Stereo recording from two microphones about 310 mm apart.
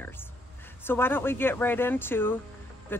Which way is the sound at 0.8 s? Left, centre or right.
Centre.